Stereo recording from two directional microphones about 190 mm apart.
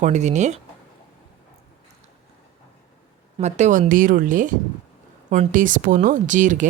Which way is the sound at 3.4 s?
35° right (ahead or behind).